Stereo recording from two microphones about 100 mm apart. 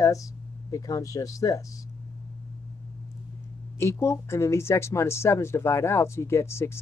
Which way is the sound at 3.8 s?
30° left (ahead or behind).